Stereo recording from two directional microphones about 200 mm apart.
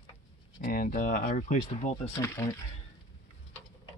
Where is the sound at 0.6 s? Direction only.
45° left (ahead or behind).